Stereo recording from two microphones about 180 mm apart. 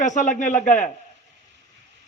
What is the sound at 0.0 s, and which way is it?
Speech, 45° left (ahead or behind).